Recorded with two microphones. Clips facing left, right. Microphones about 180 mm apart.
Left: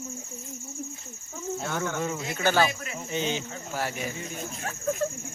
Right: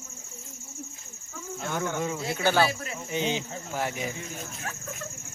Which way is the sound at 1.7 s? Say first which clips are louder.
Right 2 dB; 15° right (ahead or behind).